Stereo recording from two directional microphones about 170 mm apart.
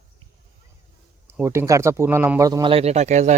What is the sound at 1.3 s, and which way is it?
Speech, 15° right (ahead or behind).